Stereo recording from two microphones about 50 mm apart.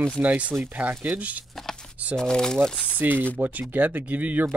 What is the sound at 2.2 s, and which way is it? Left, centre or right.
Speech, centre.